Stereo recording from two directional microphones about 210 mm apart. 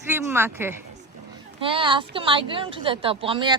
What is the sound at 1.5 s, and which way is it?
Speech, 25° right (ahead or behind).